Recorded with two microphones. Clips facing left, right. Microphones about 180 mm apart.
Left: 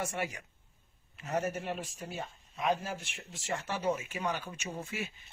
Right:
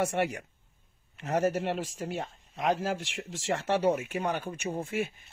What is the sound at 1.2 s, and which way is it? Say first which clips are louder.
Speech: right 6 dB; 80° right.